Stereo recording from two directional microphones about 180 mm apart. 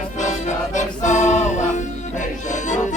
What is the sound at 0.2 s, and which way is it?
Music, 40° left (ahead or behind).